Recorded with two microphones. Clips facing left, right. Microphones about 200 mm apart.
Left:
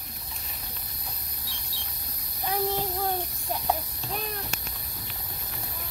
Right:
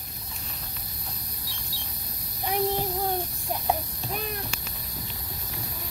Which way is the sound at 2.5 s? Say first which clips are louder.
Right 2 dB; 15° right (ahead or behind).